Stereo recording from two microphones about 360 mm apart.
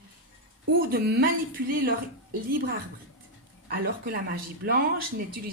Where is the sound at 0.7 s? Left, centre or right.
Right.